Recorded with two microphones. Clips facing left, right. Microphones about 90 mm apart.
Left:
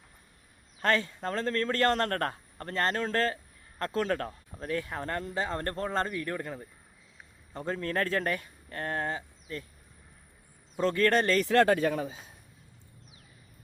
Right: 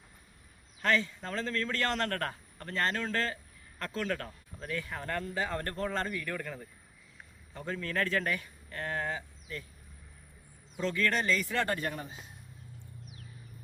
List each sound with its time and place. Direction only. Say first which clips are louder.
0.8 s a man's voice: left 2 dB; 45° left (ahead or behind); by 6.7 s 25° left (ahead or behind)
7.5 s speech: left 3 dB; 40° left (ahead or behind)
10.8 s speech: left 6 dB; 45° left (ahead or behind)